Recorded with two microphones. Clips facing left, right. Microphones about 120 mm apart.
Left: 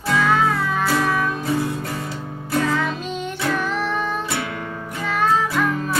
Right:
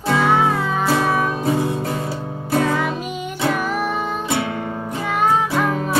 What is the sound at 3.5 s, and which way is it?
Music, 10° right (ahead or behind).